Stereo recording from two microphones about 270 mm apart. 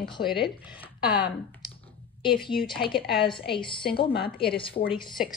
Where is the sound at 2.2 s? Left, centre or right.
Centre.